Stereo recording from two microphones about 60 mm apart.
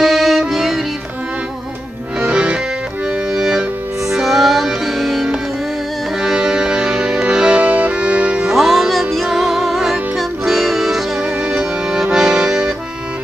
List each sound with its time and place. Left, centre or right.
0.0 s music: centre
2.1 s music: centre
8.5 s music: centre
11.3 s music: right
11.6 s accordion: centre